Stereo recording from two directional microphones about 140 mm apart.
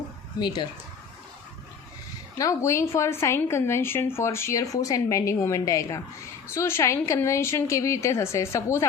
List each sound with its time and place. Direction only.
0.3 s speech: 30° left (ahead or behind)
2.4 s a woman's voice: 20° left (ahead or behind)